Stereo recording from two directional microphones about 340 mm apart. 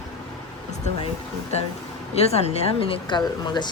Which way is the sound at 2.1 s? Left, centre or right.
Centre.